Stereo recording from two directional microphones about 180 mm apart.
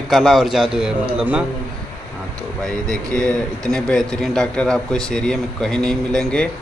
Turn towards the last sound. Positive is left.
turn(degrees=5)  # may be behind; listen again after turning